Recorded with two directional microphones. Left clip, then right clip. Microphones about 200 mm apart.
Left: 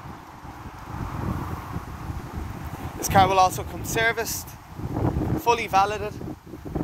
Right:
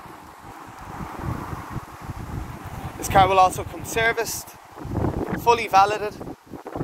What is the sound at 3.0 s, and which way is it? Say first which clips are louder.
Speech: right 2 dB; centre (ahead or behind).